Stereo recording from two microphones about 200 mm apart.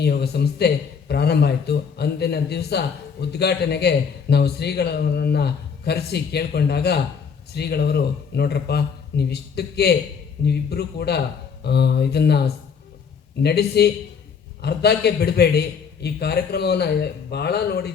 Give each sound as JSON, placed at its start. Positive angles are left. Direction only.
{"t": 0.0, "sound": "a man's voice", "side_deg": 55}